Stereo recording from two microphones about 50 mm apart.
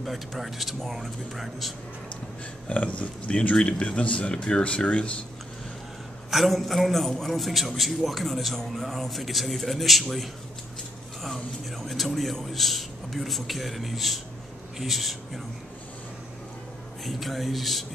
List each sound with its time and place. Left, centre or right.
0.0 s a man's voice: centre
2.7 s speech: left
6.3 s a man's voice: centre
17.0 s a man's voice: centre